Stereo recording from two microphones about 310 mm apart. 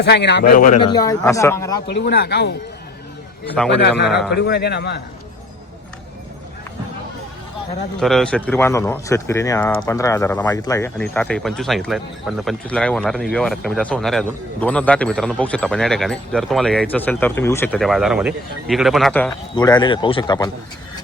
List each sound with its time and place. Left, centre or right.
0.0 s speech: left; by 1.8 s centre
2.0 s a man's voice: left
3.8 s a man's voice: left
8.0 s speech: centre